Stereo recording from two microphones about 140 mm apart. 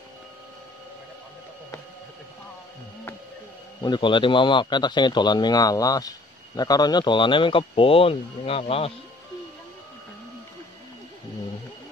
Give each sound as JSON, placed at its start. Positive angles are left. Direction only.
{"t": 3.8, "sound": "a man's voice", "side_deg": 35}